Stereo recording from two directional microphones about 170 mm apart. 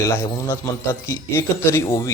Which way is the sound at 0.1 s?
15° left (ahead or behind).